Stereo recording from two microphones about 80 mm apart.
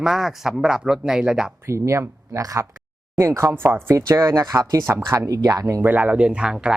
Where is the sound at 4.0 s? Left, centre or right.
Right.